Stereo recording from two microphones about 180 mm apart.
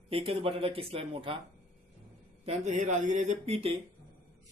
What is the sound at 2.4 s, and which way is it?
Speech, 40° right (ahead or behind).